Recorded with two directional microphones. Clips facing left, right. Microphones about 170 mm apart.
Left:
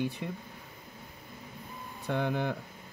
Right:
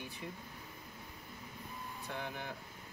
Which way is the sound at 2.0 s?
85° left.